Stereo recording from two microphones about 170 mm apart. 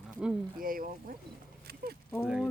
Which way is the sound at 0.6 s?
55° right (ahead or behind).